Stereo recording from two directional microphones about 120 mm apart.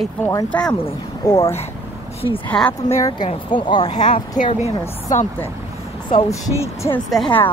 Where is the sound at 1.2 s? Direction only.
30° left (ahead or behind).